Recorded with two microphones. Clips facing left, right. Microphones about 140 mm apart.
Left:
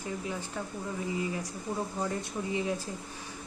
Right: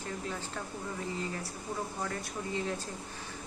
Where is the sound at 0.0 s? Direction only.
15° left (ahead or behind).